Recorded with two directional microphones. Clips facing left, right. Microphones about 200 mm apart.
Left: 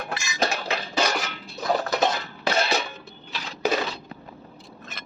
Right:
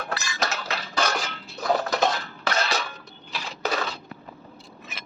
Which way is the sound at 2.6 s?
25° left (ahead or behind).